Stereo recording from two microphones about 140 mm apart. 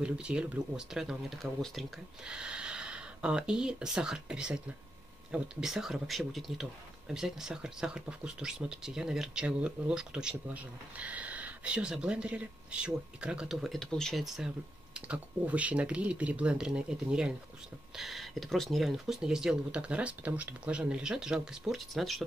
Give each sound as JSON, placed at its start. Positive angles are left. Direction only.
{"t": 0.0, "sound": "speech", "side_deg": -5}